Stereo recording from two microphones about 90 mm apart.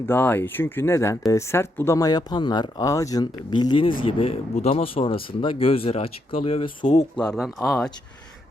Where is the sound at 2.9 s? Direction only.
40° left (ahead or behind); by 3.8 s 55° left (ahead or behind).